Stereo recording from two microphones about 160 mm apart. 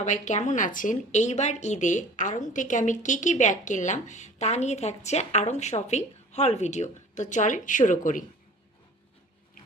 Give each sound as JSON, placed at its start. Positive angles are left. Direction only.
{"t": 0.0, "sound": "a woman's voice", "side_deg": 45}